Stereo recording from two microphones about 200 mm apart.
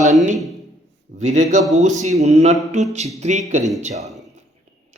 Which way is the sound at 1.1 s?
35° right (ahead or behind).